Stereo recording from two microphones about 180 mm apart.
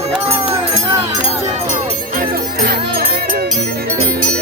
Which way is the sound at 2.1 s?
55° right (ahead or behind).